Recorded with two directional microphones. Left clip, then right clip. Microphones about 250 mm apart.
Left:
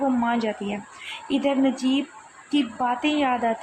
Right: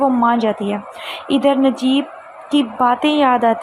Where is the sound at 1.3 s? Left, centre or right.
Centre.